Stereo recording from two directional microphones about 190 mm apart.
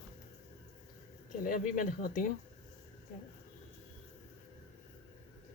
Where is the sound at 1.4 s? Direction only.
45° left (ahead or behind).